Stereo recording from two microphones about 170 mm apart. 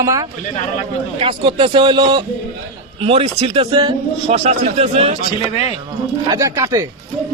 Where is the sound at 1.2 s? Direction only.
30° right (ahead or behind).